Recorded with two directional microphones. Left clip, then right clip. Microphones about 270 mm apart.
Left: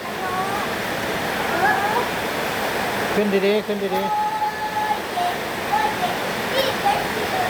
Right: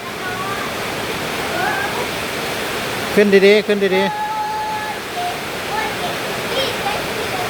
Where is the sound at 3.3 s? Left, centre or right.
Right.